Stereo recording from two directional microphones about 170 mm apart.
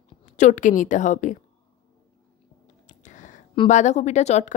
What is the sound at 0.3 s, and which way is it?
A woman's voice, 45° left (ahead or behind).